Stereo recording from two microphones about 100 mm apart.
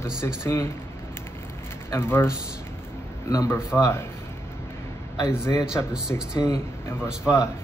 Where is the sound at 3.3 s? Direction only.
30° left (ahead or behind).